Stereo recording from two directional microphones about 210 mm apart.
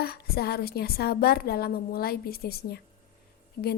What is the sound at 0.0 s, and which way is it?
A woman's voice, 45° left (ahead or behind).